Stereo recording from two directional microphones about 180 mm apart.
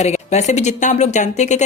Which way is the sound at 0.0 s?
40° left (ahead or behind).